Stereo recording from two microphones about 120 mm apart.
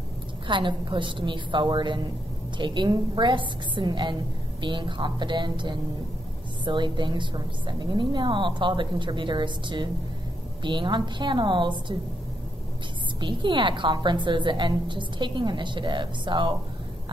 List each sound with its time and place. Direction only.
0.5 s a woman's voice: 40° right (ahead or behind)
13.2 s a woman's voice: 40° right (ahead or behind)